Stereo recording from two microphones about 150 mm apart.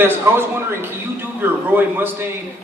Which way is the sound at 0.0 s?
15° right (ahead or behind).